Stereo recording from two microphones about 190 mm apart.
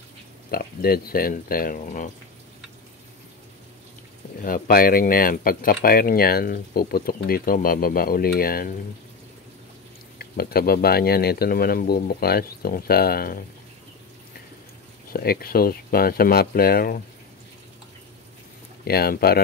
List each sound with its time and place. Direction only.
0.5 s speech: 50° left (ahead or behind)
4.4 s speech: 50° left (ahead or behind)
10.1 s speech: 55° left (ahead or behind)
15.1 s speech: 50° left (ahead or behind)
18.9 s speech: 55° left (ahead or behind)